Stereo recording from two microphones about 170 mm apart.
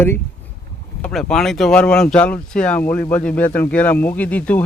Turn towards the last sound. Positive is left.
turn(degrees=10)  # may be behind; listen again after turning